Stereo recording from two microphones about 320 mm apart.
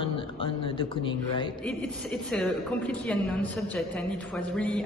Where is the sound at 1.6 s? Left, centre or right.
Centre.